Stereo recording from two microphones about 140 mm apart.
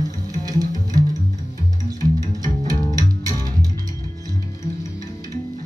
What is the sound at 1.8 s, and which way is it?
Music, 25° right (ahead or behind).